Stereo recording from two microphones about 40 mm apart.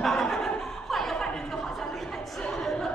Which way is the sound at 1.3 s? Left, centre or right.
Centre.